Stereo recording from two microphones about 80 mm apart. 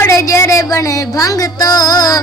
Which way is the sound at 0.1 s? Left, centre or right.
Left.